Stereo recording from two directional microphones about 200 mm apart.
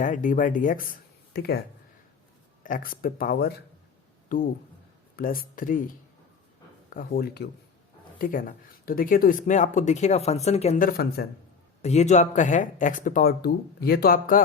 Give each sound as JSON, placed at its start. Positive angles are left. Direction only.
{"t": 0.0, "sound": "speech", "side_deg": 40}
{"t": 2.6, "sound": "speech", "side_deg": 45}
{"t": 6.9, "sound": "speech", "side_deg": 45}
{"t": 11.8, "sound": "speech", "side_deg": 35}